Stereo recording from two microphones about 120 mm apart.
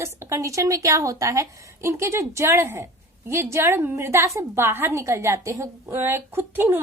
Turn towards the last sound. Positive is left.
turn(degrees=-20)  # may be behind; listen again after turning